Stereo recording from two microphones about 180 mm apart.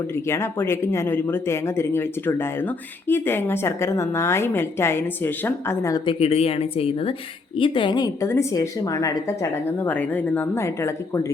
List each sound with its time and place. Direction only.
0.1 s speech: 15° left (ahead or behind)
6.1 s a woman's voice: 35° left (ahead or behind); by 11.3 s 15° left (ahead or behind)